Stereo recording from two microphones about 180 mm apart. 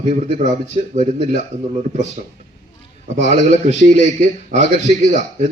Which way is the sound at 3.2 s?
40° right (ahead or behind).